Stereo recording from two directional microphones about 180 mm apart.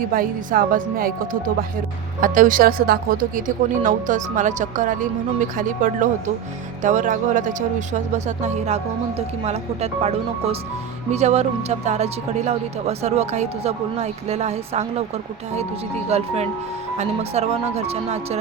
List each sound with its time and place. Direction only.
0.0 s speech: 50° right (ahead or behind); by 15.0 s 35° right (ahead or behind)
16.0 s speech: 35° right (ahead or behind)